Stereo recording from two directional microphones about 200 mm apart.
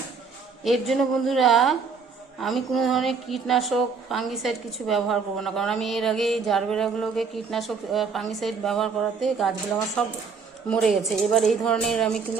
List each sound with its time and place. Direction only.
0.6 s a woman's voice: centre (ahead or behind)